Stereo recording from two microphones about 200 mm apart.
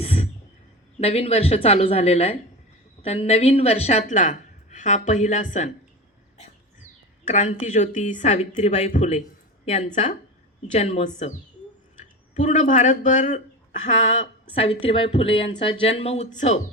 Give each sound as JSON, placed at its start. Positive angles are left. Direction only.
{"t": 0.0, "sound": "a sound", "side_deg": 30}
{"t": 0.9, "sound": "speech", "side_deg": 30}
{"t": 12.4, "sound": "speech", "side_deg": 40}